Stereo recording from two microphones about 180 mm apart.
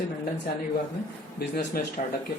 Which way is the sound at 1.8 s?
50° left (ahead or behind).